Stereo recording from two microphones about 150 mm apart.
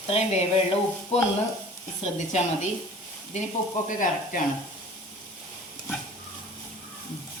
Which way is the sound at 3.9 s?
60° left (ahead or behind).